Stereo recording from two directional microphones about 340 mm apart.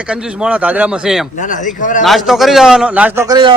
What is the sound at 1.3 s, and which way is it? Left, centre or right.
Speech, left.